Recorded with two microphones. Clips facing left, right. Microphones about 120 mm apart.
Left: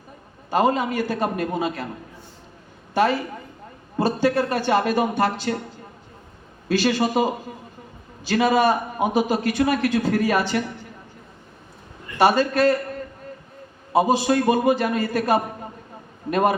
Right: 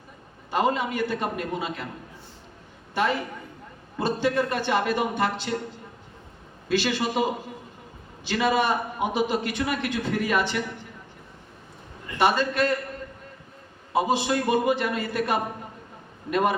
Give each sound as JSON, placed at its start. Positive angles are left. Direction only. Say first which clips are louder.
{"t": 0.5, "sound": "a man's voice", "louder": "left 4 dB", "side_deg": 40}
{"t": 3.9, "sound": "a man's voice", "louder": "left 4 dB", "side_deg": 35}
{"t": 6.7, "sound": "a man's voice", "louder": "left 4 dB", "side_deg": 40}
{"t": 8.3, "sound": "a man's voice", "louder": "left 5 dB", "side_deg": 40}
{"t": 12.2, "sound": "a man's voice", "louder": "left 5 dB", "side_deg": 40}
{"t": 13.9, "sound": "a man's voice", "louder": "left 5 dB", "side_deg": 40}